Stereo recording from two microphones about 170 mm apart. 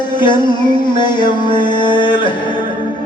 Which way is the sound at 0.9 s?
25° left (ahead or behind).